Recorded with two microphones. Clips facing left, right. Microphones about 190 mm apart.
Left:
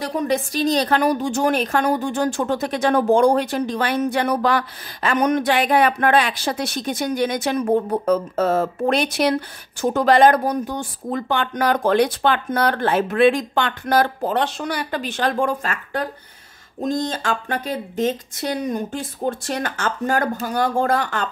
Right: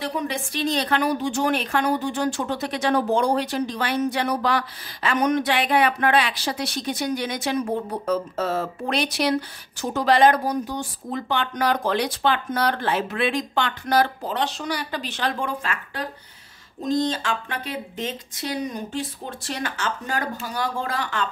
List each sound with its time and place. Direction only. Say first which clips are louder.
0.0 s a woman's voice: left 6 dB; 45° left (ahead or behind)